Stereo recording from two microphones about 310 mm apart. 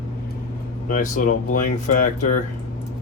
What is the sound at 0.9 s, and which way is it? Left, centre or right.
Speech, left.